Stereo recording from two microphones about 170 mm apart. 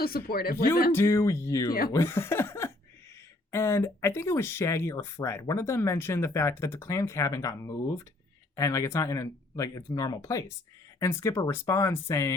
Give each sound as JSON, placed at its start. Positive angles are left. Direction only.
{"t": 0.0, "sound": "speech", "side_deg": 60}
{"t": 0.9, "sound": "speech", "side_deg": 15}